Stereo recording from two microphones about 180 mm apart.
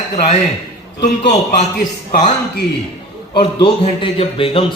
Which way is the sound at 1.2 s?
35° left (ahead or behind).